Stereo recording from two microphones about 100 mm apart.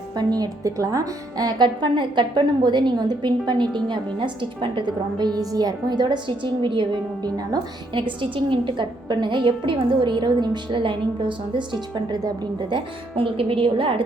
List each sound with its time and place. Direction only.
0.2 s a woman's voice: 40° right (ahead or behind)
7.9 s a woman's voice: 60° right (ahead or behind); by 12.3 s 45° right (ahead or behind)
12.7 s a woman's voice: 60° right (ahead or behind)